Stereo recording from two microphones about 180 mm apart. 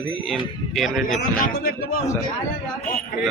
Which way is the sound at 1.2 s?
55° left (ahead or behind).